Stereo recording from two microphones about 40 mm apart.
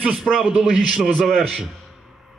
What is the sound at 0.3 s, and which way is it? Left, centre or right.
Speech, centre.